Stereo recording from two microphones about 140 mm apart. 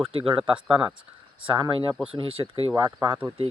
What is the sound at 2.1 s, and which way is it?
Speech, 40° right (ahead or behind).